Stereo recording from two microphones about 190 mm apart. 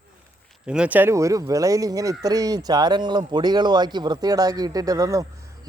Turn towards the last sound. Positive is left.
turn(degrees=-20)  # may be behind; listen again after turning